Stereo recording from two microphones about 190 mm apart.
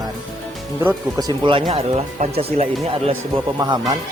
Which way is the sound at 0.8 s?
20° right (ahead or behind).